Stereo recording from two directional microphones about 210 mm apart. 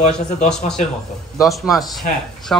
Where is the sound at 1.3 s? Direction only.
Centre (ahead or behind).